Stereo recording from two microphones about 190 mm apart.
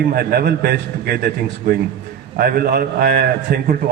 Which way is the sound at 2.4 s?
50° right (ahead or behind).